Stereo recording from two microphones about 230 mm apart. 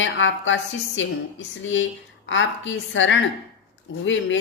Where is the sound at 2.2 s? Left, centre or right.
Left.